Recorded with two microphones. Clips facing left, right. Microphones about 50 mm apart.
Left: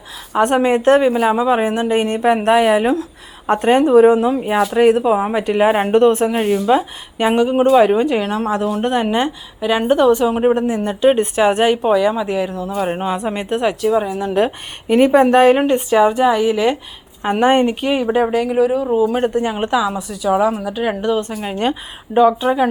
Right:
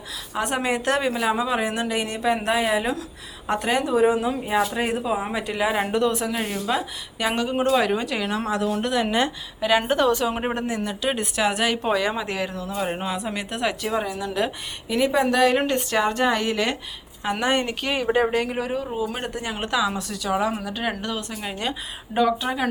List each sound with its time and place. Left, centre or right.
0.3 s a woman's voice: left
4.7 s speech: left
5.0 s speech: left
6.4 s a woman's voice: left
9.0 s speech: centre
10.8 s a woman's voice: left
11.8 s speech: centre
13.1 s speech: left
13.8 s speech: centre
14.2 s speech: left
15.5 s speech: centre
17.2 s speech: left; by 18.8 s centre
18.9 s a woman's voice: centre
22.1 s speech: centre